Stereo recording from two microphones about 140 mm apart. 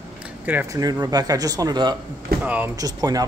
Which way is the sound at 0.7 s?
25° right (ahead or behind).